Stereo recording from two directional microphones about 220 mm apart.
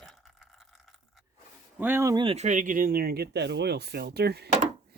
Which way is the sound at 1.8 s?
10° right (ahead or behind).